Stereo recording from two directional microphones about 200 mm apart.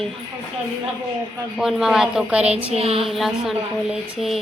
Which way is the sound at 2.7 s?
30° right (ahead or behind).